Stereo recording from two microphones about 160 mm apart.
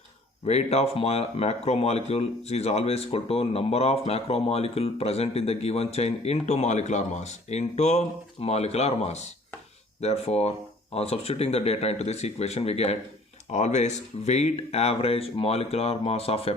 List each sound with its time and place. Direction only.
0.4 s speech: 40° left (ahead or behind)